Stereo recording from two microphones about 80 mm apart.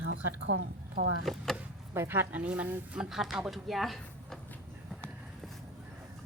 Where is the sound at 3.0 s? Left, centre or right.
Centre.